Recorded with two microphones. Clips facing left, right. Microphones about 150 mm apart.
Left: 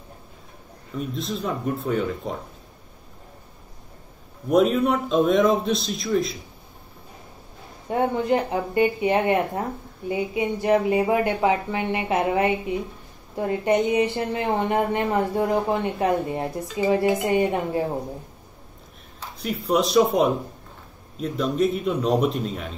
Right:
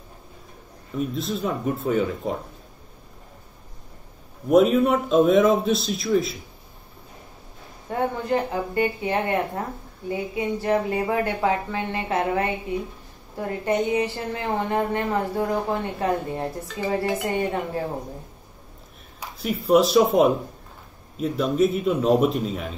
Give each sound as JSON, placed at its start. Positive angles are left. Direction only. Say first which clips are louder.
{"t": 0.9, "sound": "a man's voice", "louder": "right 2 dB", "side_deg": 0}
{"t": 4.5, "sound": "a man's voice", "louder": "right 2 dB", "side_deg": 0}
{"t": 7.9, "sound": "a woman's voice", "louder": "left 2 dB", "side_deg": 20}
{"t": 19.3, "sound": "a man's voice", "louder": "right 4 dB", "side_deg": 0}